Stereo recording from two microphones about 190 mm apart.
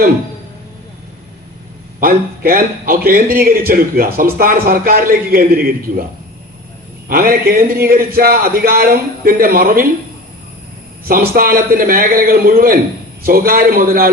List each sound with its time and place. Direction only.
2.0 s a man's voice: 50° right (ahead or behind)
7.1 s a man's voice: 50° right (ahead or behind)
11.0 s a man's voice: 50° right (ahead or behind)